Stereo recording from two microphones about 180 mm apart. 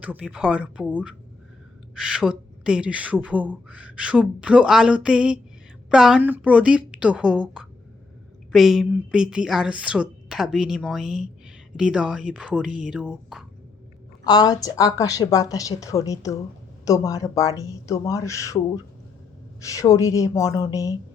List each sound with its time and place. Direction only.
0.0 s speech: 5° right (ahead or behind)
2.0 s speech: 5° right (ahead or behind)
14.3 s a woman's voice: 20° left (ahead or behind)